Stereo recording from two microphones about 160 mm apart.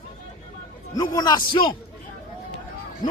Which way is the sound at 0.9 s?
25° left (ahead or behind).